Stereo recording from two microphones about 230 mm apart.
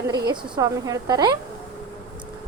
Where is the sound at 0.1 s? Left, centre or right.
Centre.